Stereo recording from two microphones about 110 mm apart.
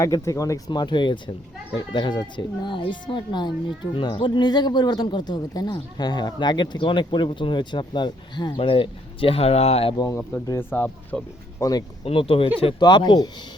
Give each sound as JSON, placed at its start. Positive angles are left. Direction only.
{"t": 0.0, "sound": "speech", "side_deg": 30}
{"t": 0.7, "sound": "a man's voice", "side_deg": 45}
{"t": 8.5, "sound": "speech", "side_deg": 55}
{"t": 10.0, "sound": "speech", "side_deg": 25}
{"t": 12.0, "sound": "speech", "side_deg": 60}
{"t": 12.8, "sound": "a man's voice", "side_deg": 40}